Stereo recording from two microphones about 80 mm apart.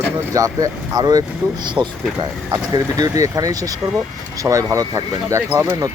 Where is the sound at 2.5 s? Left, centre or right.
Right.